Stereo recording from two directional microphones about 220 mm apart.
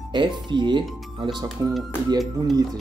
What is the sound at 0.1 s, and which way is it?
Speech, 20° right (ahead or behind).